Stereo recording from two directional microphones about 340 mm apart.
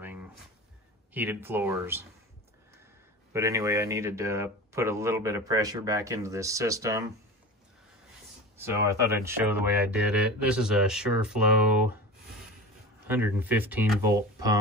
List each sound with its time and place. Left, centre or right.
0.0 s a sound: centre
1.1 s speech: centre
3.3 s speech: centre
8.5 s speech: centre
13.0 s speech: centre